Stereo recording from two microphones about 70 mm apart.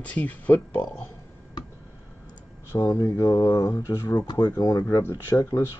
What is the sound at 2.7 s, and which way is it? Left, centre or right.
Speech, left.